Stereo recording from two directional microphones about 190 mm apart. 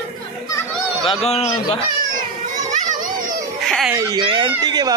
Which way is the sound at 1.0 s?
35° left (ahead or behind).